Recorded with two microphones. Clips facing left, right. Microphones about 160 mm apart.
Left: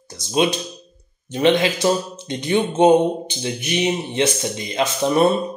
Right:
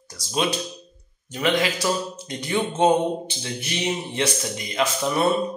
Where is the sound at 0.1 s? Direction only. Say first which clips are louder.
Left 5 dB; 20° left (ahead or behind).